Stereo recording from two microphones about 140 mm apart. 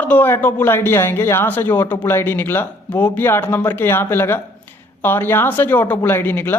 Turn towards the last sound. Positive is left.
turn(degrees=15)  # may be behind; listen again after turning